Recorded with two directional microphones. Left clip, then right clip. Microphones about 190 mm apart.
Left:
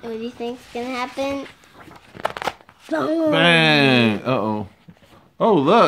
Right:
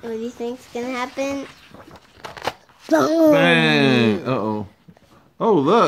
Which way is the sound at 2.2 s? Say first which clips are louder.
Left 11 dB; 30° left (ahead or behind).